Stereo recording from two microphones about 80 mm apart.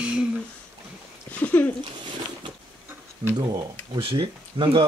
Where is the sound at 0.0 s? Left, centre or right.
Centre.